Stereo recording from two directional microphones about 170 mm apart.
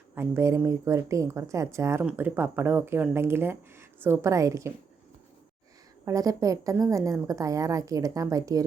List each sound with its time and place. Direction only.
0.1 s speech: 15° right (ahead or behind)
6.1 s a woman's voice: 20° right (ahead or behind)